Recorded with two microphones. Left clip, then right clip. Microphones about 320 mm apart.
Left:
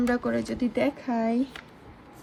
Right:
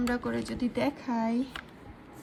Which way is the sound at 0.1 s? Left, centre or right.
Centre.